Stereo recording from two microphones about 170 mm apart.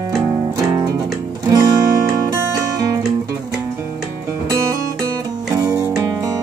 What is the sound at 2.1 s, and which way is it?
Music, 15° right (ahead or behind).